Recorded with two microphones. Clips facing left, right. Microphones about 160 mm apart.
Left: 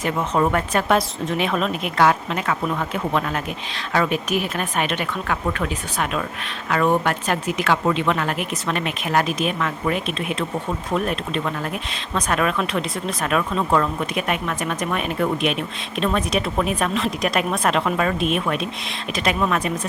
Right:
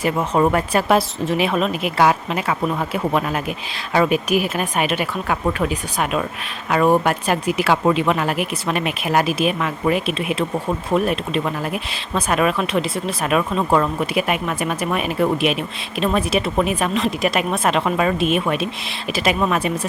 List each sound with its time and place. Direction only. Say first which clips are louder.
0.0 s speech: right 3 dB; 10° right (ahead or behind)